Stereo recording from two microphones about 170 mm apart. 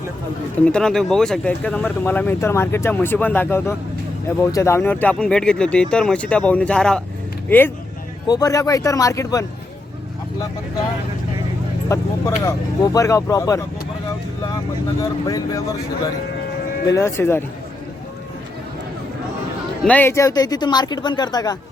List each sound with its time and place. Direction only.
0.6 s speech: 5° left (ahead or behind)
8.3 s speech: 20° left (ahead or behind)
11.9 s speech: 15° left (ahead or behind)
15.3 s speech: 20° left (ahead or behind)
16.8 s speech: 15° left (ahead or behind)
19.8 s speech: 10° left (ahead or behind)